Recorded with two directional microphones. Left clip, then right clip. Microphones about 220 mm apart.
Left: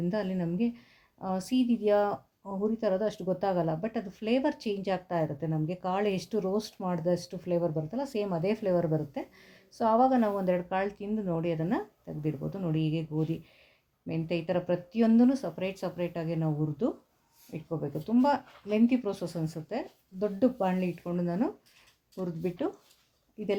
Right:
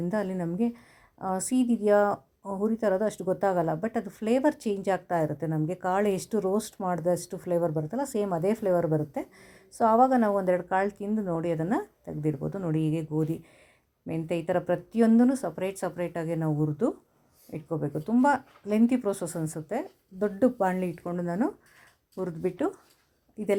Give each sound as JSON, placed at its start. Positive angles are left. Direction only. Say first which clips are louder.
{"t": 0.1, "sound": "speech", "louder": "right 2 dB", "side_deg": -20}